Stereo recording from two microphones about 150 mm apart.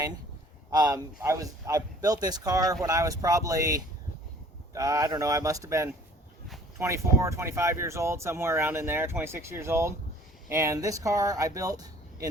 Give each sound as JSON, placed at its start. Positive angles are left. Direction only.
{"t": 0.7, "sound": "a man's voice", "side_deg": -25}